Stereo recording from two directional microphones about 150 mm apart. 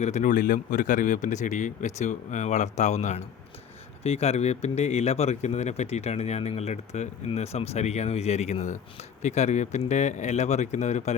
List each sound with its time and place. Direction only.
0.0 s speech: 55° left (ahead or behind)